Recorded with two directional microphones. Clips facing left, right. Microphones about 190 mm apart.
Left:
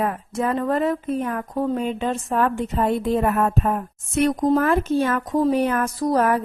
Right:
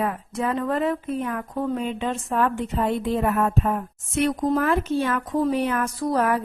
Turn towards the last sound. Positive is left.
turn(degrees=45)  # may be behind; listen again after turning